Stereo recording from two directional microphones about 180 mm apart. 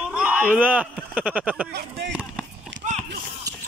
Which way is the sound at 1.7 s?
65° right (ahead or behind).